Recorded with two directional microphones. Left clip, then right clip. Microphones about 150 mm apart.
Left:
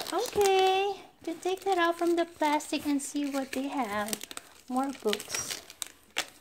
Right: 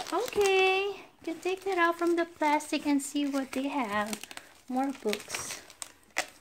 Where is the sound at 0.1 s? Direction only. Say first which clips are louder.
Left 1 dB; centre (ahead or behind).